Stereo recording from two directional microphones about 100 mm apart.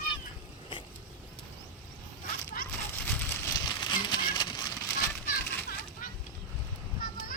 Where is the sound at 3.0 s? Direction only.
15° left (ahead or behind).